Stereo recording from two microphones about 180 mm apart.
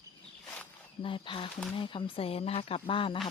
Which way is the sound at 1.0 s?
30° left (ahead or behind).